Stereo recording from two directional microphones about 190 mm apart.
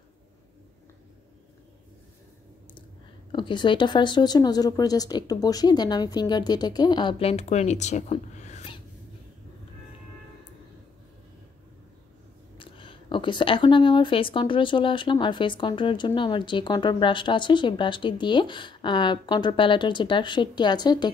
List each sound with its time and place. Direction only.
3.3 s speech: 25° left (ahead or behind)
12.5 s speech: 25° left (ahead or behind)